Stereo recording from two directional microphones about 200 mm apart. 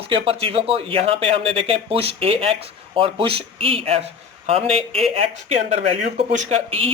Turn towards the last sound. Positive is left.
turn(degrees=-30)  # may be behind; listen again after turning